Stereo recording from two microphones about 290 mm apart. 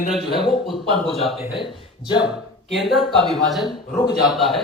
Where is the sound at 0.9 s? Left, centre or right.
Centre.